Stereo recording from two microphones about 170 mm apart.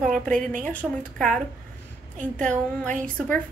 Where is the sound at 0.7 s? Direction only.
5° left (ahead or behind).